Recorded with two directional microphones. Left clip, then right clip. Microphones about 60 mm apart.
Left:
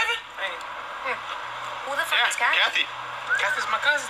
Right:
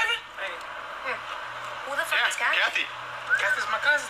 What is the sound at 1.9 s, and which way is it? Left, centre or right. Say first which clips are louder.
Speech: left 2 dB; left.